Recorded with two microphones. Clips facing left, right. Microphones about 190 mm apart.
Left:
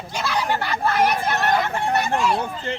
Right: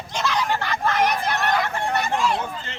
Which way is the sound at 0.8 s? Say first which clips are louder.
Left 2 dB; 10° left (ahead or behind).